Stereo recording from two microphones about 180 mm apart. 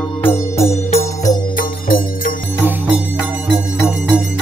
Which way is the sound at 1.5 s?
50° left (ahead or behind).